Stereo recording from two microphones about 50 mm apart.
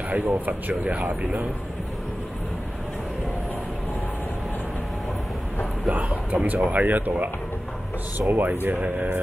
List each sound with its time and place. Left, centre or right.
0.3 s speech: right
5.9 s speech: right
8.3 s speech: right
8.7 s speech: right